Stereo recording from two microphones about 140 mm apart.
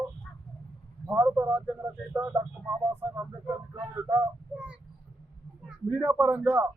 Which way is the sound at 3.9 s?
15° right (ahead or behind).